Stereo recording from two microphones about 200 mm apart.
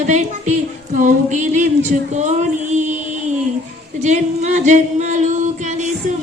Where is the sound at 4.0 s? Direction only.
35° right (ahead or behind).